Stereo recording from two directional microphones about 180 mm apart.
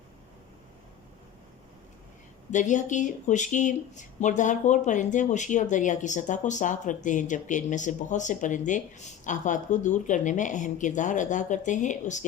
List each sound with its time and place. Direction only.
2.5 s speech: 45° left (ahead or behind)